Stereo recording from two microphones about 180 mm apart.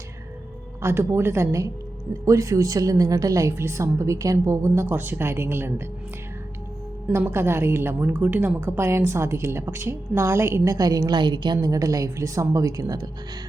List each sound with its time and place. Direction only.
0.8 s a woman's voice: 15° right (ahead or behind)
7.1 s a woman's voice: 15° right (ahead or behind)